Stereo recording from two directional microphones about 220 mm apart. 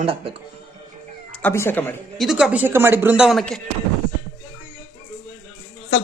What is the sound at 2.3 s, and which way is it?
Speech, 5° right (ahead or behind).